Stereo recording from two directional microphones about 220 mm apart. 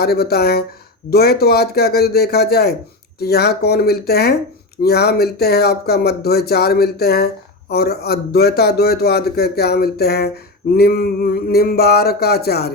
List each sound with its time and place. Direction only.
0.0 s a man's voice: 45° left (ahead or behind)